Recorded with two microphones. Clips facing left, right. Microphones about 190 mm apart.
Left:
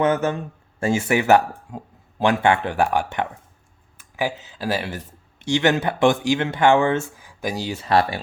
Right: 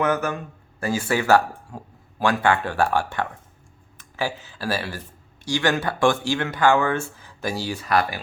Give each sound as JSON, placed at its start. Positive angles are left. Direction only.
{"t": 0.0, "sound": "speech", "side_deg": 25}